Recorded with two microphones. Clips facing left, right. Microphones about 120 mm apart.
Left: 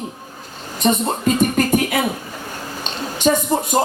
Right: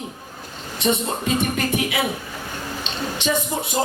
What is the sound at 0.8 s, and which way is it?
Speech, 45° left (ahead or behind).